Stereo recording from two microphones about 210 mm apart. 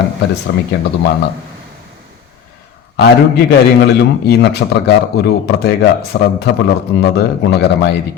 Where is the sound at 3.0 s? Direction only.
50° left (ahead or behind).